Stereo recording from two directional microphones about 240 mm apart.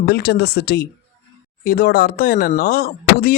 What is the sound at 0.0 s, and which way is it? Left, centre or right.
Speech, left.